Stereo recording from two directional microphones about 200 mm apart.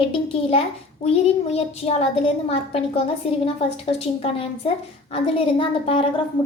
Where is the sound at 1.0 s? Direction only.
30° left (ahead or behind).